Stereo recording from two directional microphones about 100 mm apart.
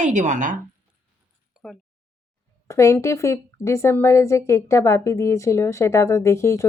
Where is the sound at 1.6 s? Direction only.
5° right (ahead or behind).